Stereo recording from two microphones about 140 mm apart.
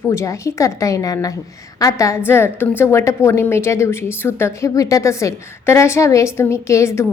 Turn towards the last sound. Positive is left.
turn(degrees=20)  # may be behind; listen again after turning